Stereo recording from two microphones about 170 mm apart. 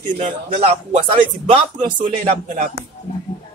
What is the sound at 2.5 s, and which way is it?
Speech, 40° right (ahead or behind).